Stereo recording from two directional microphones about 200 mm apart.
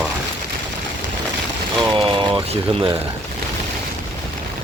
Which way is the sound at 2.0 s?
25° right (ahead or behind).